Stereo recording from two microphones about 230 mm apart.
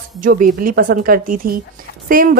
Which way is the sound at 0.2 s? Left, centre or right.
Right.